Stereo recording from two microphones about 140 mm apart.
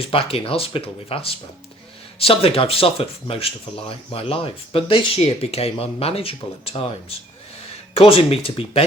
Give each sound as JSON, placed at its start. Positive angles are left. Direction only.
{"t": 0.0, "sound": "speech", "side_deg": 40}
{"t": 7.9, "sound": "speech", "side_deg": 40}